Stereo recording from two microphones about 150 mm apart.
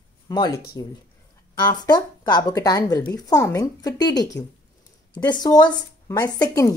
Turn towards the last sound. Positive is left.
turn(degrees=20)  # may be behind; listen again after turning